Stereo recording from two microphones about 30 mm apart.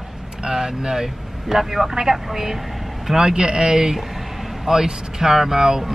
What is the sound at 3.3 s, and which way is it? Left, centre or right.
Speech, right.